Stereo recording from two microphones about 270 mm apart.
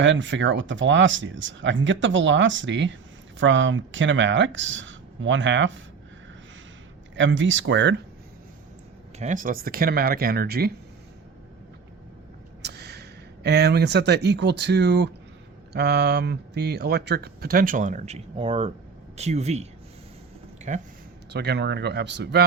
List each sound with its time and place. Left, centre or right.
0.0 s speech: right
7.2 s speech: right
9.1 s speech: right
12.6 s speech: right
20.7 s speech: right
21.3 s speech: right